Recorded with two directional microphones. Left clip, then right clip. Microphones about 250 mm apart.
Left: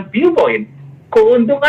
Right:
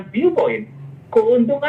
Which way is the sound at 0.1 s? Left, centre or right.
Left.